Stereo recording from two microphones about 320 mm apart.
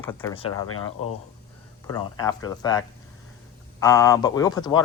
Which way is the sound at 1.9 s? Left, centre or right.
Centre.